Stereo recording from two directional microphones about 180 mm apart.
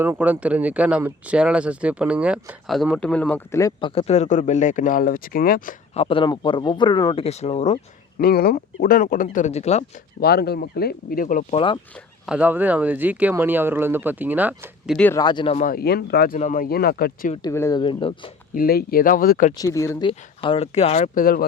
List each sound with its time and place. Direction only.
0.0 s speech: 10° right (ahead or behind); by 5.7 s 50° left (ahead or behind)
5.9 s speech: 30° left (ahead or behind)
8.2 s speech: 60° left (ahead or behind); by 9.8 s 35° left (ahead or behind)
10.2 s speech: 60° left (ahead or behind)
11.5 s speech: 30° left (ahead or behind)
12.2 s speech: 5° right (ahead or behind)
14.9 s speech: 10° left (ahead or behind)
15.2 s speech: 25° left (ahead or behind)
15.5 s speech: 50° left (ahead or behind)
17.5 s speech: 15° left (ahead or behind)
18.5 s speech: 55° left (ahead or behind)
19.5 s speech: 15° left (ahead or behind)
20.1 s speech: 30° left (ahead or behind)